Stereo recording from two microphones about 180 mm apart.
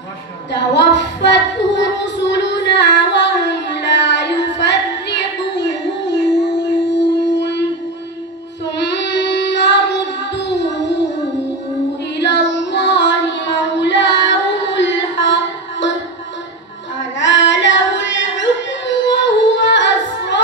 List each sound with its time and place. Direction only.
0.5 s child singing: 75° left (ahead or behind)
7.3 s a sound: 70° left (ahead or behind)
8.7 s child singing: 75° left (ahead or behind)
12.2 s child singing: 80° left
17.2 s singing: 90° left